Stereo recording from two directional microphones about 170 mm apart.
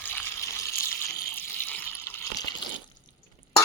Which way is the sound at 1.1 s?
60° left (ahead or behind).